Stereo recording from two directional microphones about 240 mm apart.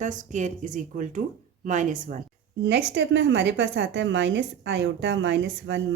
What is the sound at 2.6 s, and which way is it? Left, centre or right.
A woman's voice, right.